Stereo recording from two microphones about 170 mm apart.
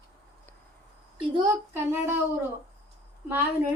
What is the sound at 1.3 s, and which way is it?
Child singing, 20° right (ahead or behind).